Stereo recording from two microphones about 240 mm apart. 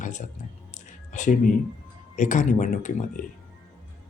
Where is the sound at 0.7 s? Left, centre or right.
Left.